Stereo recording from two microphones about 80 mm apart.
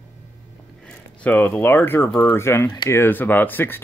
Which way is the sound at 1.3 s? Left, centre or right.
Left.